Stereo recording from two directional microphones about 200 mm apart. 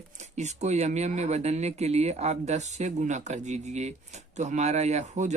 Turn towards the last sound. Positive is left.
turn(degrees=-35)  # may be behind; listen again after turning